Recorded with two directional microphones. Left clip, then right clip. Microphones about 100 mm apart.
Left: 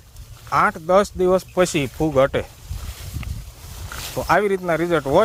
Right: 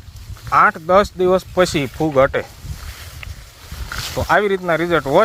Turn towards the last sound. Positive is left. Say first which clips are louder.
# right 3 dB
turn(degrees=35)  # may be behind; listen again after turning